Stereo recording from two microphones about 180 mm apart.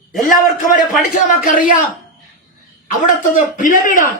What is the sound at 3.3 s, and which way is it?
Speech, 45° left (ahead or behind).